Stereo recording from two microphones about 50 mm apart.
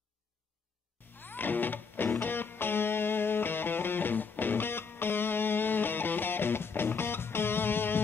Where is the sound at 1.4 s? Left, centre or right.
Left.